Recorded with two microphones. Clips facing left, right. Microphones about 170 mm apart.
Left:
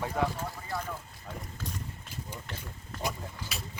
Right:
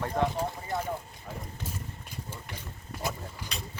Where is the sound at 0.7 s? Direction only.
20° right (ahead or behind).